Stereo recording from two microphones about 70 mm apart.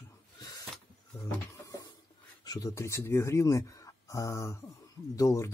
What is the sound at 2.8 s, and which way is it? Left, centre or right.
Speech, left.